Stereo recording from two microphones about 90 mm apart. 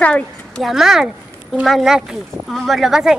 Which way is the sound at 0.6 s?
5° right (ahead or behind).